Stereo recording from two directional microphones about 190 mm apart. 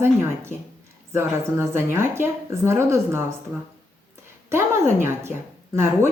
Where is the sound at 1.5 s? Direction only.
15° right (ahead or behind).